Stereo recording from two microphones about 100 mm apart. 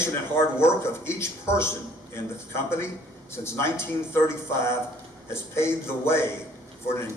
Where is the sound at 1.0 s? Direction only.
25° left (ahead or behind).